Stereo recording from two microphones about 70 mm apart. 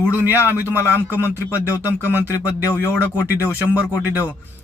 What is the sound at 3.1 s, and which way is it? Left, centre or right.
Speech, right.